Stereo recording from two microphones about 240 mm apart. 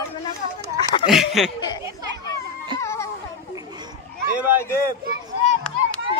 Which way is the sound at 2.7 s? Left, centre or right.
Centre.